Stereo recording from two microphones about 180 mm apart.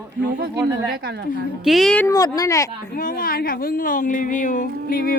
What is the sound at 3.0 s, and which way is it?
Speech, 50° left (ahead or behind).